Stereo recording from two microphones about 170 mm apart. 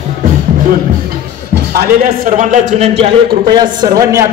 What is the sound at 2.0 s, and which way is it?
Speech, 50° right (ahead or behind).